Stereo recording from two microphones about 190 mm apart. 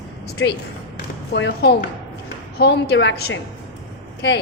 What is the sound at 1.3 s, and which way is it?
A woman's voice, 65° left (ahead or behind).